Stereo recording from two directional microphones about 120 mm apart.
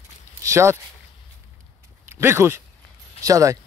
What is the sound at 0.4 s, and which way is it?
Speech, 25° right (ahead or behind).